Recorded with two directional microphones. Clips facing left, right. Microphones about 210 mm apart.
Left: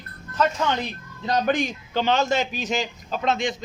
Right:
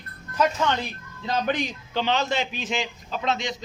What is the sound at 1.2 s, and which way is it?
A man's voice, 45° left (ahead or behind).